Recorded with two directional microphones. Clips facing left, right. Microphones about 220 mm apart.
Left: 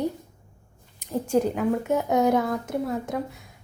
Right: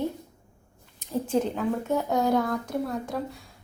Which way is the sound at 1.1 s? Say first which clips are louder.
Left 3 dB; 10° left (ahead or behind).